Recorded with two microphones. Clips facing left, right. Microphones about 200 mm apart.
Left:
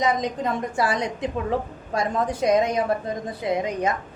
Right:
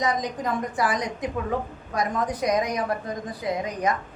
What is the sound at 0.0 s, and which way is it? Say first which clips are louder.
A woman's voice: left 3 dB; 25° left (ahead or behind).